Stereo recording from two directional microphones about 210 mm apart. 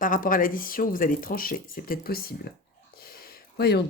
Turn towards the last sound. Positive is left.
turn(degrees=50)  # may be behind; listen again after turning